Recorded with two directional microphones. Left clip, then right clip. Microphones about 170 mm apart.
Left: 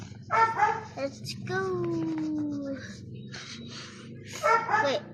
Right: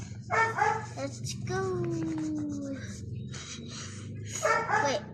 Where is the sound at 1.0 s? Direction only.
40° left (ahead or behind).